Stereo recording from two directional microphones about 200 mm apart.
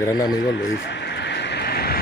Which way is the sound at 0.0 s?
20° left (ahead or behind).